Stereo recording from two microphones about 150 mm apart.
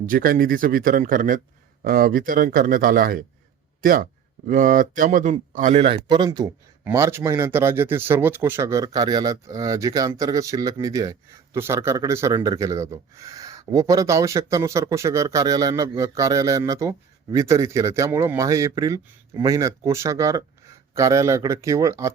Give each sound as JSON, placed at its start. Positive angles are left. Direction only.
{"t": 0.0, "sound": "speech", "side_deg": -65}
{"t": 5.8, "sound": "speech", "side_deg": -35}
{"t": 6.8, "sound": "speech", "side_deg": -15}